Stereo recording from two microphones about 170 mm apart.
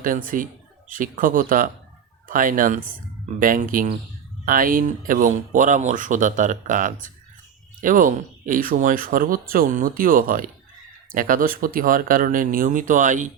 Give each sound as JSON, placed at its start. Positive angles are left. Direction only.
{"t": 0.0, "sound": "speech", "side_deg": -55}